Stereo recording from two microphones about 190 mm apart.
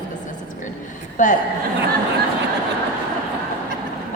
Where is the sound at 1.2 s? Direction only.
40° left (ahead or behind).